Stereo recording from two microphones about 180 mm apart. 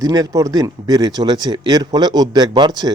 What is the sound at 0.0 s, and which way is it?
Speech, 20° right (ahead or behind).